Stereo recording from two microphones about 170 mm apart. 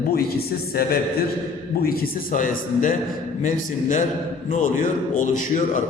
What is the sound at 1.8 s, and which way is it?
A man's voice, 55° left (ahead or behind).